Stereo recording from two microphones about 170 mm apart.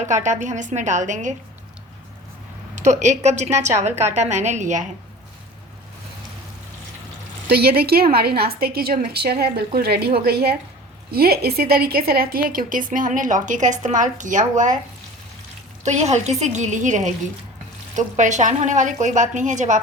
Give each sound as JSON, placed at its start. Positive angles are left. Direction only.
{"t": 0.0, "sound": "a woman's voice", "side_deg": -45}
{"t": 2.7, "sound": "a woman's voice", "side_deg": -45}
{"t": 7.4, "sound": "a woman's voice", "side_deg": -65}
{"t": 15.8, "sound": "a woman's voice", "side_deg": -40}